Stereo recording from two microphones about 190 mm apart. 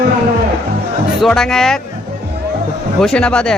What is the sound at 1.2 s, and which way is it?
Music, centre (ahead or behind).